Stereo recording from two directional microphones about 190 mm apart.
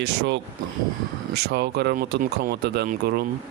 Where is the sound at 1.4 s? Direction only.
60° right (ahead or behind).